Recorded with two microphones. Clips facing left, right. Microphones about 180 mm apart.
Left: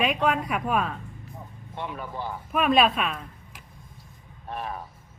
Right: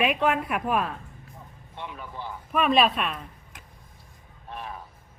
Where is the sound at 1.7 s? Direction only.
45° left (ahead or behind).